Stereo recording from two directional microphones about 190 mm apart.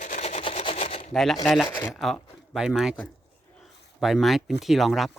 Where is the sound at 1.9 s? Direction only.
Centre (ahead or behind).